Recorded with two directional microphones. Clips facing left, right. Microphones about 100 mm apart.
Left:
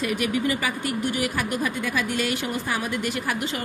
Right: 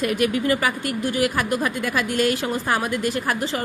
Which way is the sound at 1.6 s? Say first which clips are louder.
Right 2 dB; 45° right (ahead or behind).